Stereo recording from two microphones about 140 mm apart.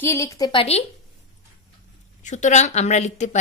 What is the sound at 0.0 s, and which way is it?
Speech, 20° left (ahead or behind).